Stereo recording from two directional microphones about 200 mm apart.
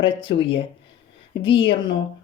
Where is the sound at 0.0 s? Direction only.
25° left (ahead or behind).